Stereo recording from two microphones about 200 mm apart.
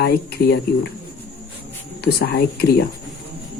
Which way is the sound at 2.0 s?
55° left (ahead or behind).